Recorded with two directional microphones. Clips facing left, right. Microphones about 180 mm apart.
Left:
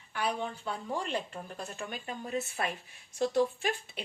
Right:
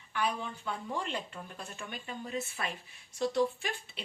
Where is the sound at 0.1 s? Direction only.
40° left (ahead or behind).